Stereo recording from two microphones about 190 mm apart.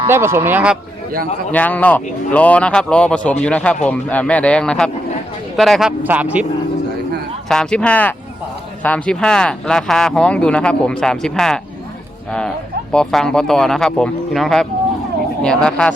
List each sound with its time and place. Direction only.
0.1 s speech: 15° right (ahead or behind)
1.5 s speech: 10° left (ahead or behind); by 6.4 s 10° right (ahead or behind)
7.4 s speech: 5° left (ahead or behind)
12.9 s speech: 5° left (ahead or behind)